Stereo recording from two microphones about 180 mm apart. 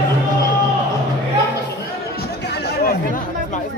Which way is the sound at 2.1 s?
70° left (ahead or behind).